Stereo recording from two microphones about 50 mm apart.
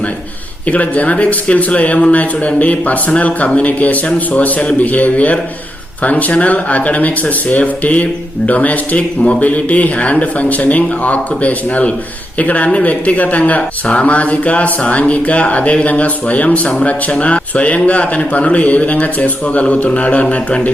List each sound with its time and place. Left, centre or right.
0.7 s speech: left